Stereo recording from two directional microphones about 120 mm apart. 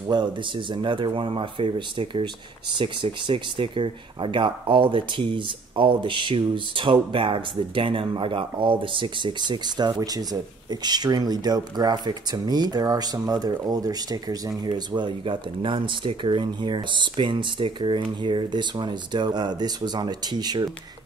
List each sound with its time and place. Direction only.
0.1 s speech: 35° right (ahead or behind)